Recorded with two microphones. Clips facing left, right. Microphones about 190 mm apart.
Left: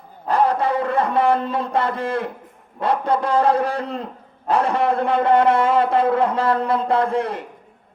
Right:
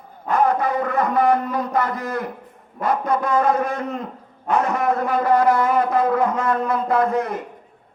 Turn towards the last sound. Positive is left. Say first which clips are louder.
# even
turn(degrees=30)  # may be behind; listen again after turning